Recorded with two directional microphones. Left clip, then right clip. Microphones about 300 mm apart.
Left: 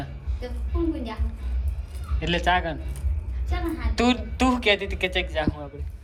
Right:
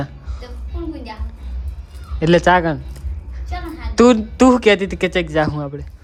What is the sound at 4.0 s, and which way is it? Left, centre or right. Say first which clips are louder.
Speech: right 12 dB; right.